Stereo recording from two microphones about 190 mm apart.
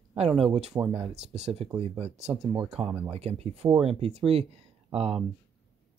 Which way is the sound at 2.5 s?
5° right (ahead or behind).